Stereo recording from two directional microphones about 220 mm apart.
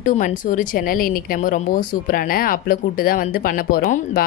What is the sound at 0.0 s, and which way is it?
Speech, 35° left (ahead or behind).